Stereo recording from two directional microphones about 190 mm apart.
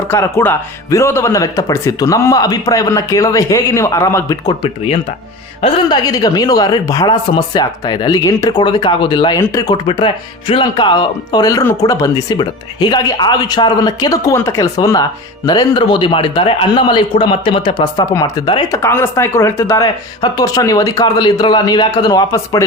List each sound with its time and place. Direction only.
0.3 s speech: 15° left (ahead or behind)